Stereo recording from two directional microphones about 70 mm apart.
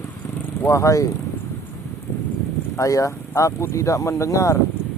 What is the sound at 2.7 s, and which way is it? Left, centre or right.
Speech, left.